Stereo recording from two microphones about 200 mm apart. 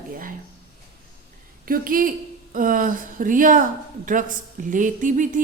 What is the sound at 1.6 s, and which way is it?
A woman's voice, 45° right (ahead or behind).